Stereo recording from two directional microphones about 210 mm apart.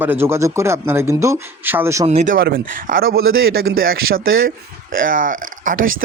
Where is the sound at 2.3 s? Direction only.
45° right (ahead or behind).